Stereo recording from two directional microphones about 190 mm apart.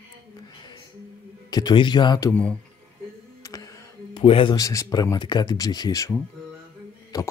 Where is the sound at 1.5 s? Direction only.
20° left (ahead or behind).